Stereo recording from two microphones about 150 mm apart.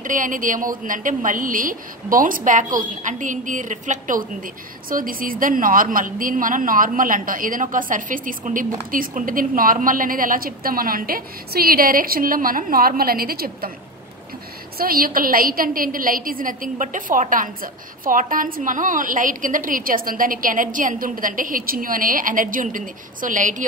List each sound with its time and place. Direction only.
0.0 s a woman's voice: 60° right (ahead or behind); by 13.7 s 80° right
14.8 s a woman's voice: 75° right (ahead or behind); by 23.5 s 60° right (ahead or behind)